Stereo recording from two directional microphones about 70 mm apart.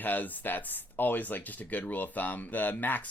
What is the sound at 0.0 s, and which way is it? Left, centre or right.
Speech, left.